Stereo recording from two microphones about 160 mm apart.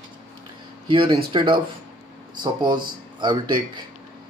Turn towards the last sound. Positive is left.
turn(degrees=-30)  # may be behind; listen again after turning